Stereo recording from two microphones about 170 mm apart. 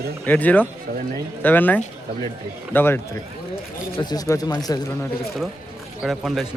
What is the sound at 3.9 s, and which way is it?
Speech, 25° left (ahead or behind).